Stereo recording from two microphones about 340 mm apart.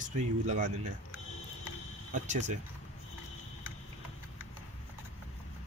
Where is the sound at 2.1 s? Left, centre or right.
Right.